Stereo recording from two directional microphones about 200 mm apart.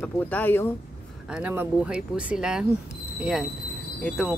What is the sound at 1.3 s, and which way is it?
Speech, 10° right (ahead or behind).